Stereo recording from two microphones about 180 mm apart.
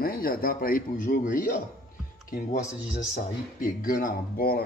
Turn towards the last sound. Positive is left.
turn(degrees=55)  # may be behind; listen again after turning